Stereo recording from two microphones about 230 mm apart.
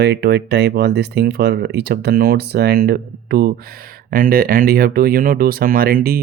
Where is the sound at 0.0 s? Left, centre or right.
Right.